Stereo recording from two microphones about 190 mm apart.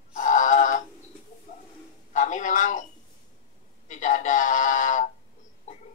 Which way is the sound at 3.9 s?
40° left (ahead or behind).